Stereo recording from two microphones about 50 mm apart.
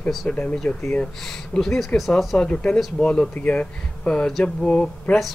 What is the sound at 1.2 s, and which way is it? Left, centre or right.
Speech, centre.